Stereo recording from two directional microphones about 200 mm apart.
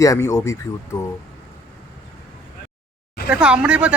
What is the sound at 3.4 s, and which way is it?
Speech, 5° right (ahead or behind).